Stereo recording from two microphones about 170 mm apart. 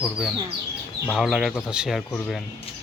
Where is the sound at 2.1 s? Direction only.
5° left (ahead or behind).